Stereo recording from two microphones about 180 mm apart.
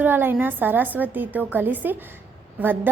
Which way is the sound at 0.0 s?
10° right (ahead or behind).